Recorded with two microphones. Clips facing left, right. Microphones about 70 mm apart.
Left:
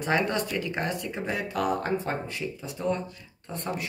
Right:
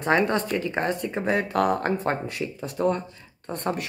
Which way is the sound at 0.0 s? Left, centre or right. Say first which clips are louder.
Right 4 dB; right.